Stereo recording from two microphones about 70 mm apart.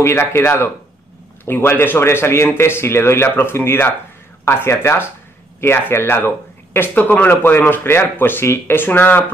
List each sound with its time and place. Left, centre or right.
0.0 s speech: left